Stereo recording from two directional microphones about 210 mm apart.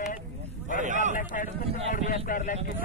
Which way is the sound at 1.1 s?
40° left (ahead or behind).